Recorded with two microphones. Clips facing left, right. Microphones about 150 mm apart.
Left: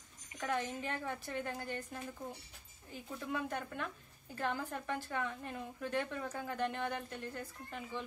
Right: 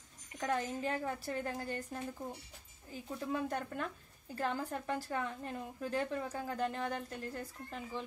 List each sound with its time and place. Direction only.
0.4 s a woman's voice: 35° right (ahead or behind)